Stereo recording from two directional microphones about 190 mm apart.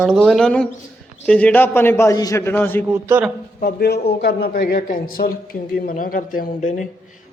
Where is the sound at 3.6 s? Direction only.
55° left (ahead or behind); by 6.8 s 40° left (ahead or behind).